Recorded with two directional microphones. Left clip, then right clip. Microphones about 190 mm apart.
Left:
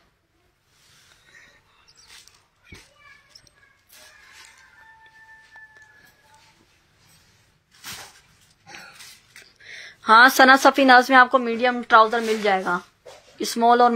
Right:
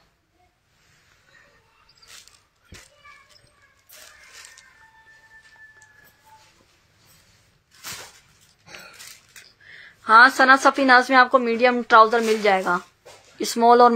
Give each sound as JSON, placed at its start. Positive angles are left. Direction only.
{"t": 9.7, "sound": "a woman's voice", "side_deg": 40}
{"t": 11.2, "sound": "speech", "side_deg": 0}